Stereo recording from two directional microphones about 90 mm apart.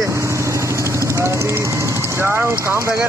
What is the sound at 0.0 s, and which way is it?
Vehicle, 35° right (ahead or behind).